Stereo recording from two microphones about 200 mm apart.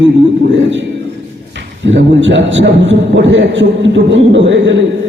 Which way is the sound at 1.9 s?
65° right (ahead or behind).